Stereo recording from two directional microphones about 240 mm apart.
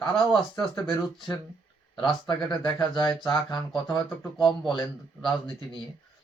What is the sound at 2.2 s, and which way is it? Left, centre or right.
Speech, centre.